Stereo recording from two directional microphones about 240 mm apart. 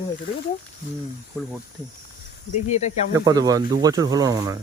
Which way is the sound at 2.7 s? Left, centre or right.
Left.